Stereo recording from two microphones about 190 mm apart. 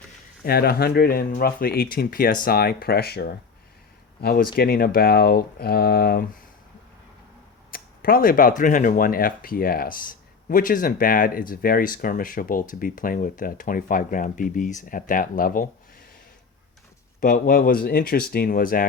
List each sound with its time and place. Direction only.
0.4 s speech: 55° left (ahead or behind)
7.7 s speech: 50° left (ahead or behind)
17.2 s speech: 45° left (ahead or behind)